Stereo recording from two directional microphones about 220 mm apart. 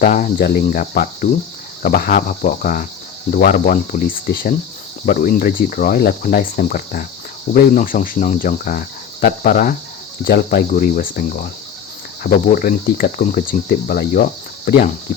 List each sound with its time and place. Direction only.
0.0 s speech: 40° left (ahead or behind)